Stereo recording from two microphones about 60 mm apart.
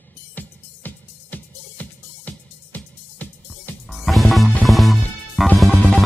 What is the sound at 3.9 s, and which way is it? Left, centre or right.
Music, centre.